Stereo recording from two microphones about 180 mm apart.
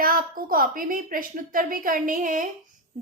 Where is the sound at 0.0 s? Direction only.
55° right (ahead or behind).